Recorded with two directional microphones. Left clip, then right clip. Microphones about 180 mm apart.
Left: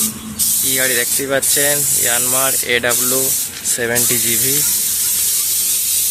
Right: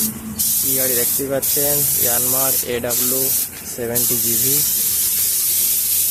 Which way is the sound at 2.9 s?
15° left (ahead or behind).